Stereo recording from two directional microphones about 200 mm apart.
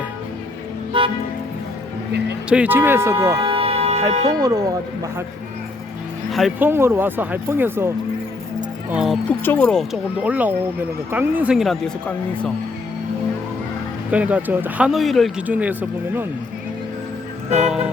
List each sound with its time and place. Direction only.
0.9 s music: 25° right (ahead or behind)
2.5 s speech: 10° right (ahead or behind)
3.4 s music: 30° right (ahead or behind)
4.3 s speech: 20° right (ahead or behind)
6.3 s speech: centre (ahead or behind)
6.7 s speech: 10° right (ahead or behind)
8.9 s speech: 5° right (ahead or behind)
9.3 s speech: 10° left (ahead or behind)
14.1 s speech: 5° right (ahead or behind)
17.7 s speech: 5° right (ahead or behind)